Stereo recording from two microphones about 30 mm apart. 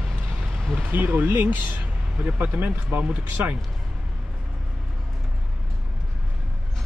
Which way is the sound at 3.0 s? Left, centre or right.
Right.